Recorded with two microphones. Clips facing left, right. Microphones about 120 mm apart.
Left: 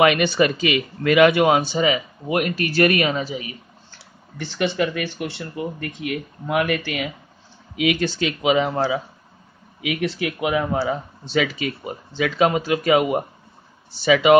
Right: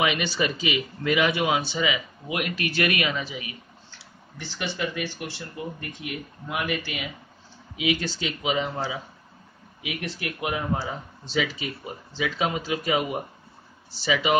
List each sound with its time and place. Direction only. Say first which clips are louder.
0.0 s a man's voice: left 8 dB; 55° left (ahead or behind); by 4.0 s 35° left (ahead or behind)
4.4 s speech: left 8 dB; 60° left (ahead or behind)
9.8 s speech: left 9 dB; 90° left; by 14.3 s 60° left (ahead or behind)